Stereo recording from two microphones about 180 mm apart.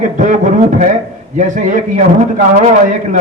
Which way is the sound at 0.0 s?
45° right (ahead or behind).